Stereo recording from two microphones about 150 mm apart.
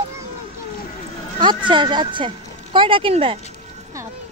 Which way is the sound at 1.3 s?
30° right (ahead or behind).